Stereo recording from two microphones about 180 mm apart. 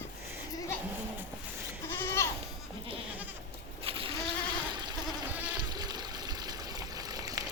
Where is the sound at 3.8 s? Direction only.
30° right (ahead or behind).